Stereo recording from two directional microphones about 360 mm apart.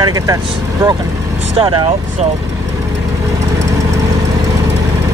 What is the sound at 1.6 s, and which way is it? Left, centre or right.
Speech, centre.